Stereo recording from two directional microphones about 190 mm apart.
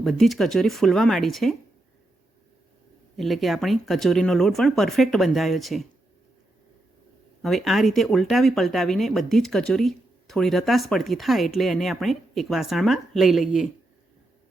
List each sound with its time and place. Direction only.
0.0 s speech: centre (ahead or behind)
3.2 s speech: centre (ahead or behind)
7.4 s speech: centre (ahead or behind)